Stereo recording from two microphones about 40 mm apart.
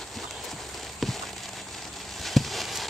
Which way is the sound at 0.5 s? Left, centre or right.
Centre.